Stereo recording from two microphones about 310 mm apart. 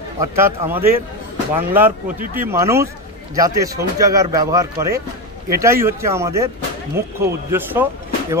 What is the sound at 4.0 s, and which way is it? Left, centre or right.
Speech, centre.